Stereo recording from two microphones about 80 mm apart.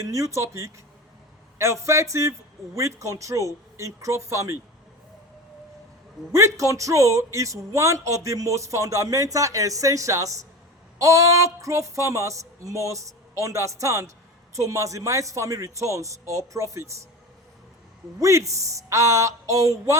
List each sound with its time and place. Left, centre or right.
0.0 s a man's voice: right
6.3 s a man's voice: right
18.2 s a man's voice: right